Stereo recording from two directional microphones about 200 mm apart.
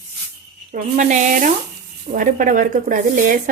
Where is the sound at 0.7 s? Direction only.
40° right (ahead or behind).